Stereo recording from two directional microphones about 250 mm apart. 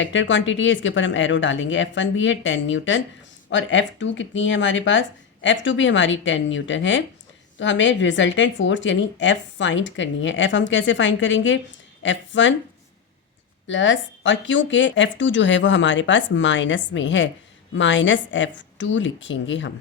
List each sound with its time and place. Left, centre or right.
0.0 s speech: left
13.7 s speech: left